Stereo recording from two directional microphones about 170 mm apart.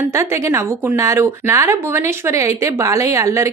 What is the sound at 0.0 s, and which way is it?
A woman's voice, 15° right (ahead or behind).